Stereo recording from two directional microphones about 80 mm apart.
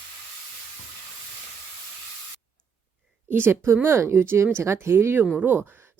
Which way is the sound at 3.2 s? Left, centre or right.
Right.